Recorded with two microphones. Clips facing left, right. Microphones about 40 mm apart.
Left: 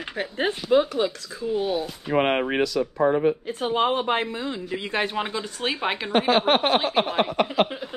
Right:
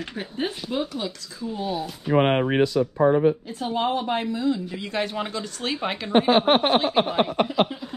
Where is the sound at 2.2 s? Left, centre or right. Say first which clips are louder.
Right 2 dB; left.